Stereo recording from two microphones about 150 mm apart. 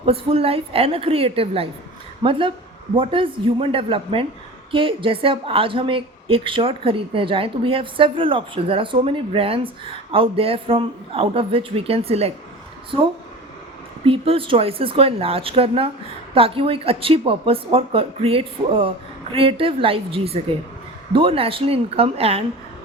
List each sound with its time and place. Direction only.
0.0 s a woman's voice: 40° right (ahead or behind)
14.0 s a woman's voice: 35° right (ahead or behind)